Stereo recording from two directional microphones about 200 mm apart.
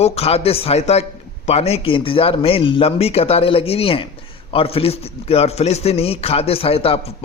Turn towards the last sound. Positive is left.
turn(degrees=30)  # may be behind; listen again after turning